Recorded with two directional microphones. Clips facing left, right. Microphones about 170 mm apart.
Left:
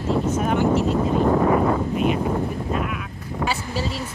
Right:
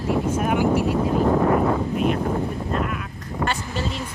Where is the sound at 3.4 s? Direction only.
5° left (ahead or behind).